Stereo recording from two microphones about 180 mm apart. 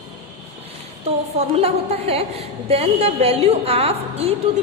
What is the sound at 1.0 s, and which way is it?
A woman's voice, 35° right (ahead or behind).